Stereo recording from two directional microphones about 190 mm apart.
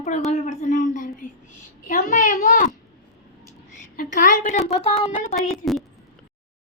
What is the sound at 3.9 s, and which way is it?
Speech, 40° left (ahead or behind).